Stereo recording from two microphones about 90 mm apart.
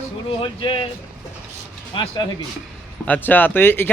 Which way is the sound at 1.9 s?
70° left (ahead or behind).